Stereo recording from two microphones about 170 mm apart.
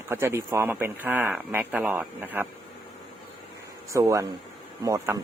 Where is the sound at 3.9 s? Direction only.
20° right (ahead or behind).